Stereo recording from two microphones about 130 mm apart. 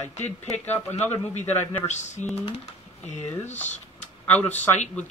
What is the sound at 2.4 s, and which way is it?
Speech, 55° left (ahead or behind).